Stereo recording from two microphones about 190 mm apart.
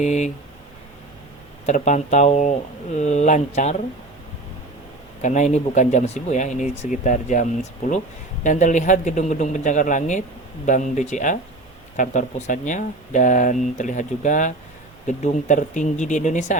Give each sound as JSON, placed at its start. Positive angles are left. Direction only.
{"t": 0.0, "sound": "speech", "side_deg": 40}
{"t": 1.6, "sound": "speech", "side_deg": 40}
{"t": 5.2, "sound": "speech", "side_deg": 40}
{"t": 8.4, "sound": "speech", "side_deg": 40}